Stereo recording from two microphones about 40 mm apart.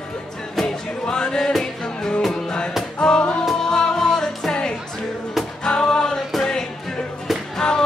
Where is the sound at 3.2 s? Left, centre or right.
Left.